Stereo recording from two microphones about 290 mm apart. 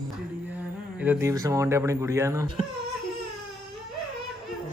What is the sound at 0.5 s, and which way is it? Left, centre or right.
Speech, centre.